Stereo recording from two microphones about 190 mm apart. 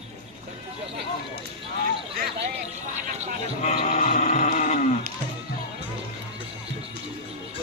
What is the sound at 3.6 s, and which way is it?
Sheep, 35° left (ahead or behind).